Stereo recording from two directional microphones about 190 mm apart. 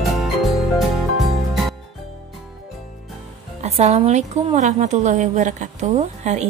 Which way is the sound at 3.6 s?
35° right (ahead or behind).